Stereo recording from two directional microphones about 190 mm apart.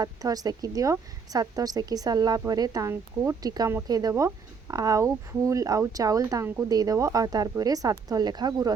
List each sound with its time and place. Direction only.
0.0 s a woman's voice: 20° right (ahead or behind)